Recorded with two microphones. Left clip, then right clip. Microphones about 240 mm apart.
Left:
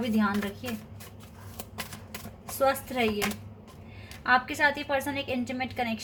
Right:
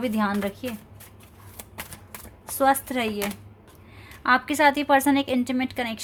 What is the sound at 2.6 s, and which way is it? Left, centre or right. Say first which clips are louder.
Speech: right 5 dB; right.